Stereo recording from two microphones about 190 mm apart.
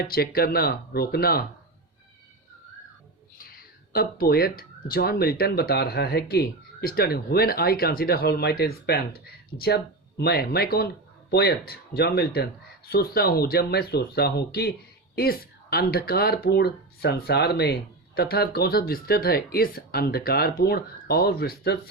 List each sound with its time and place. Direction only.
0.1 s speech: 55° left (ahead or behind)
3.3 s speech: 50° left (ahead or behind)